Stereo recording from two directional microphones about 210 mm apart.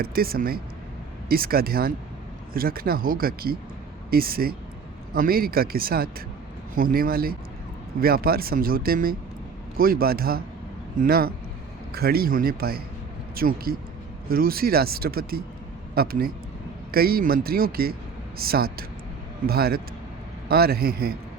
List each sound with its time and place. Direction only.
0.0 s speech: 45° right (ahead or behind)